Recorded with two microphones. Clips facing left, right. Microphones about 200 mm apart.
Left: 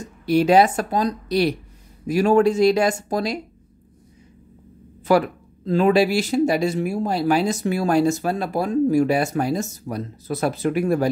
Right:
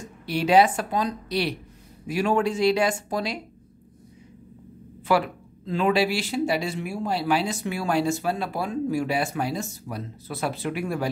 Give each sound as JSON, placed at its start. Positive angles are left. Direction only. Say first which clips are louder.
{"t": 0.3, "sound": "speech", "louder": "left 4 dB", "side_deg": 45}
{"t": 5.1, "sound": "speech", "louder": "left 5 dB", "side_deg": 45}